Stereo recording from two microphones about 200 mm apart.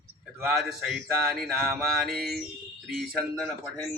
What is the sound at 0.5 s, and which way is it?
Mantra, centre (ahead or behind).